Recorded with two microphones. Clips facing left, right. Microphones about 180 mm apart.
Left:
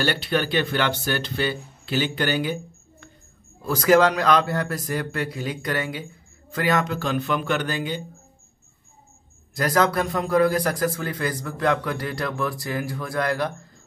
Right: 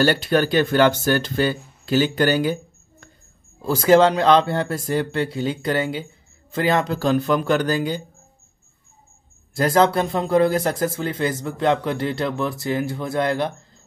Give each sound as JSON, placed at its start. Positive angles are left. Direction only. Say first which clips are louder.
{"t": 0.0, "sound": "speech", "louder": "right 6 dB", "side_deg": -45}
{"t": 3.6, "sound": "a man's voice", "louder": "right 3 dB", "side_deg": -25}
{"t": 9.5, "sound": "a man's voice", "louder": "right 4 dB", "side_deg": -25}